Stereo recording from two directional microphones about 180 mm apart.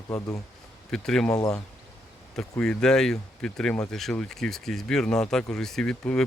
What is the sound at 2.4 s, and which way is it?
Speech, 5° left (ahead or behind).